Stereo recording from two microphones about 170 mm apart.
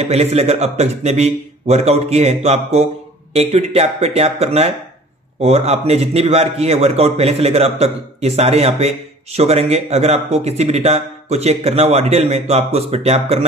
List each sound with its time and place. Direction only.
0.0 s a man's voice: 40° right (ahead or behind)